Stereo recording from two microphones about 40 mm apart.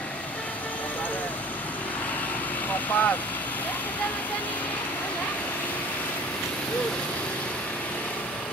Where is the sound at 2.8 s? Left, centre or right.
Left.